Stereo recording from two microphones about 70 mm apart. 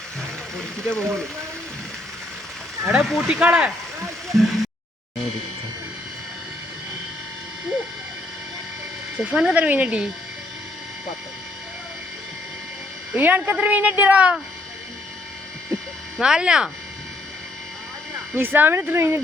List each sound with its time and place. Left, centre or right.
0.5 s a sound: centre
2.8 s speech: centre
3.2 s speech: centre
4.3 s speech: centre
9.3 s speech: centre
9.6 s speech: right
13.1 s speech: right
16.2 s speech: centre
18.3 s speech: right